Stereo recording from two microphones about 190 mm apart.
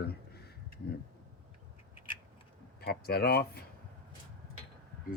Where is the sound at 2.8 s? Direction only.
55° left (ahead or behind).